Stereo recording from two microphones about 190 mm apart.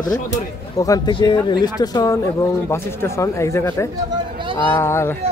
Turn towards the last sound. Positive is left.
turn(degrees=15)  # may be behind; listen again after turning